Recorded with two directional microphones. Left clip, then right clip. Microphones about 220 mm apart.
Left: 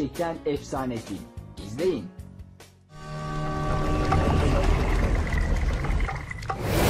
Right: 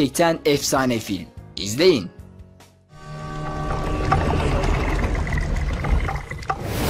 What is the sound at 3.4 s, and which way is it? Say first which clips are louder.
Boat: right 2 dB; centre (ahead or behind).